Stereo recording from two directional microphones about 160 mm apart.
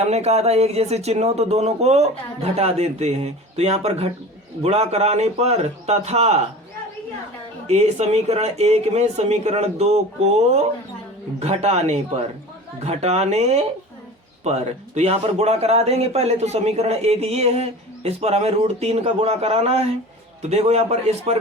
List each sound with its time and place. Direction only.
0.0 s a man's voice: 40° right (ahead or behind)
7.7 s speech: 45° right (ahead or behind)
11.3 s a man's voice: 45° right (ahead or behind)